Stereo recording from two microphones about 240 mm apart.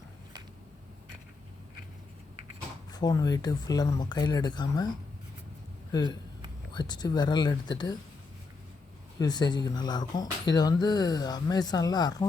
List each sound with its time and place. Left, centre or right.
2.9 s speech: centre
6.7 s speech: centre
9.1 s speech: centre